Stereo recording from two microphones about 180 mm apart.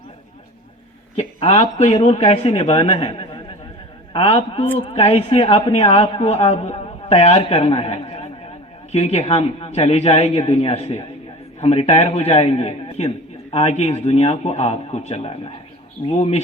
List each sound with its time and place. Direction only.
1.1 s a man's voice: 35° left (ahead or behind)